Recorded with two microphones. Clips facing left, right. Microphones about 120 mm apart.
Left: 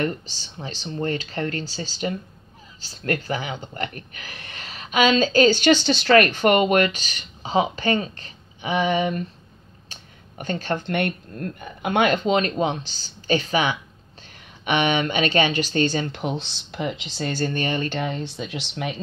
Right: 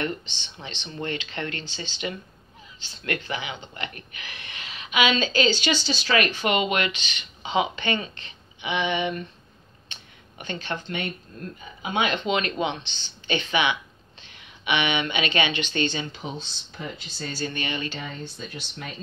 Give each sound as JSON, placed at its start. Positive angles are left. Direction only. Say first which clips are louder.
{"t": 0.0, "sound": "speech", "louder": "left 4 dB", "side_deg": 40}
{"t": 16.1, "sound": "speech", "louder": "left 7 dB", "side_deg": 65}
{"t": 17.5, "sound": "speech", "louder": "left 6 dB", "side_deg": 40}
{"t": 17.9, "sound": "speech", "louder": "left 8 dB", "side_deg": 70}